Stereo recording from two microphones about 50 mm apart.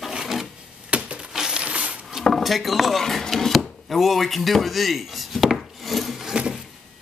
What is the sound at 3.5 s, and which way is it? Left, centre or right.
Chopping, centre.